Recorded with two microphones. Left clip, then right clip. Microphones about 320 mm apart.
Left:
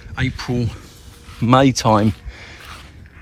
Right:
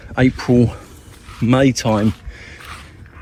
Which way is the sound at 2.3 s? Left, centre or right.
Centre.